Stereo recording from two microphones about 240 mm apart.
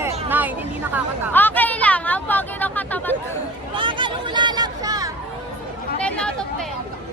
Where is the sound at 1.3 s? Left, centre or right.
Centre.